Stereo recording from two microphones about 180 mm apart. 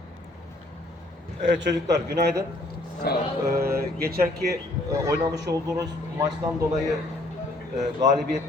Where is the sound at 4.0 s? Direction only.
60° right (ahead or behind).